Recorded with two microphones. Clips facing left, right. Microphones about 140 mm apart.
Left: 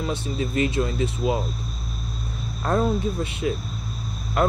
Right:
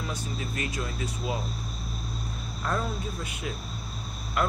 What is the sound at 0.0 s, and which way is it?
Speech, 25° left (ahead or behind).